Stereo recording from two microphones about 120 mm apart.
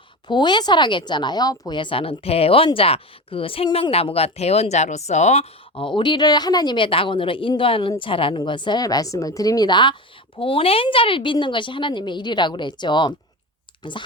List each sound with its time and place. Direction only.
0.3 s a woman's voice: 40° left (ahead or behind); by 5.5 s 70° left (ahead or behind)
5.7 s a woman's voice: 45° left (ahead or behind)